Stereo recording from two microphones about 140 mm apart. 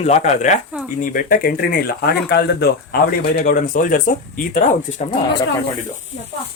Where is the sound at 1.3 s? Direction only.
90° left.